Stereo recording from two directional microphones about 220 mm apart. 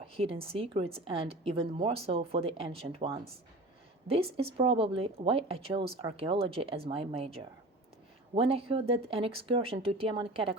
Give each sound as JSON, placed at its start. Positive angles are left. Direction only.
{"t": 0.0, "sound": "speech", "side_deg": -25}